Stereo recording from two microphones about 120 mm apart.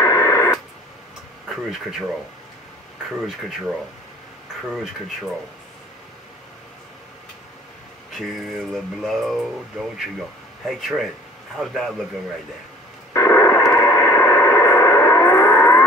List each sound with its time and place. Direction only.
0.0 s radio: 25° left (ahead or behind)
1.5 s speech: centre (ahead or behind)
3.3 s speech: centre (ahead or behind)
8.1 s speech: centre (ahead or behind)
13.1 s radio: 25° left (ahead or behind)